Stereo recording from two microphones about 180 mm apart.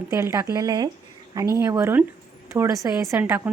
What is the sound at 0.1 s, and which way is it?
A woman's voice, 15° right (ahead or behind).